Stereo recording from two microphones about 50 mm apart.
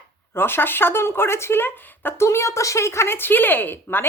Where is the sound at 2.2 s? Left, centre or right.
Left.